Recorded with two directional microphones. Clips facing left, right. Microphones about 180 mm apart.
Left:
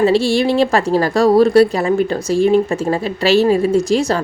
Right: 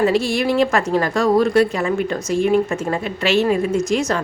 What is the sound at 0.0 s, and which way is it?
A woman's voice, 30° left (ahead or behind).